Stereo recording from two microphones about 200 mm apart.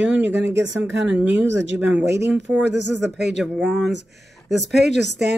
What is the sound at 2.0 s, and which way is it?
Speech, 60° right (ahead or behind).